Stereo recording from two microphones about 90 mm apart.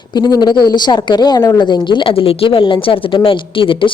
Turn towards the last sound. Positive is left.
turn(degrees=70)  # may be behind; listen again after turning